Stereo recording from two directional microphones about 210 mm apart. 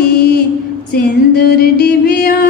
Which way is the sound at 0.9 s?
50° left (ahead or behind).